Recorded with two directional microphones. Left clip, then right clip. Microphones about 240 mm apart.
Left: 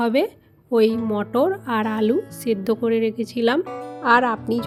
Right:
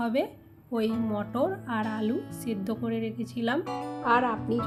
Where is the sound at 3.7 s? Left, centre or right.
Centre.